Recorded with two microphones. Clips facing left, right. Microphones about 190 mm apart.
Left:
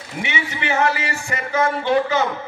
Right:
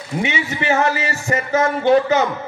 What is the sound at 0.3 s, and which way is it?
A man's voice, 40° right (ahead or behind).